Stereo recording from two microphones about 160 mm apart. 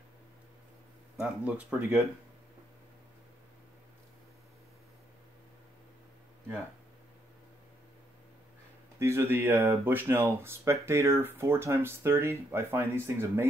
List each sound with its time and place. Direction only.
1.2 s speech: 10° right (ahead or behind)
9.0 s speech: 15° right (ahead or behind)